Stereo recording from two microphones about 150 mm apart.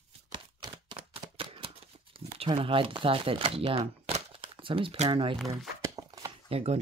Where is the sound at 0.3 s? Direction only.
30° right (ahead or behind).